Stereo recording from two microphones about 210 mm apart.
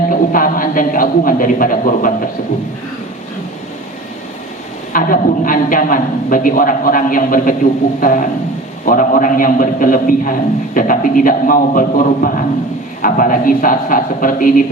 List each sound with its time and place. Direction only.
0.1 s a man's voice: 40° left (ahead or behind)
4.9 s a man's voice: 40° left (ahead or behind)